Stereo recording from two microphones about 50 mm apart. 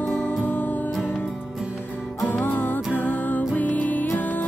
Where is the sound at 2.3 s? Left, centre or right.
Left.